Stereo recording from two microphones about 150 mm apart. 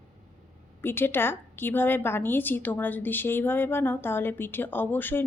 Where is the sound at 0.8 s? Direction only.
15° left (ahead or behind).